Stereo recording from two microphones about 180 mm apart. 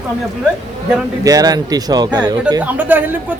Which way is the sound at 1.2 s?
20° right (ahead or behind).